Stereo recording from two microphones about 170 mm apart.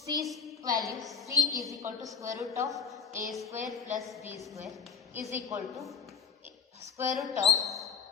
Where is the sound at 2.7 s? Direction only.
Centre (ahead or behind).